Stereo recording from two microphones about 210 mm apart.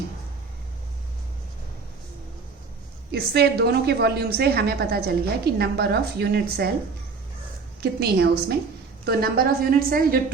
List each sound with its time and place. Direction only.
3.1 s a woman's voice: 50° right (ahead or behind)
7.8 s a woman's voice: 50° right (ahead or behind)